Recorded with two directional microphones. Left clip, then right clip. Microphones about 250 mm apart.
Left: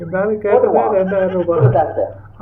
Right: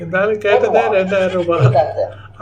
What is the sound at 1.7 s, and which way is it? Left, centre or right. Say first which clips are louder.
Speech: right 1 dB; left.